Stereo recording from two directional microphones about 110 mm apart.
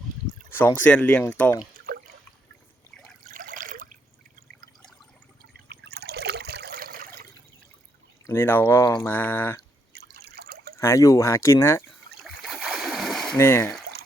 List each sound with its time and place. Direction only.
0.6 s speech: 20° left (ahead or behind)
8.3 s speech: 20° left (ahead or behind)
10.8 s speech: 25° left (ahead or behind)
11.9 s splash: centre (ahead or behind)
13.3 s speech: 20° left (ahead or behind)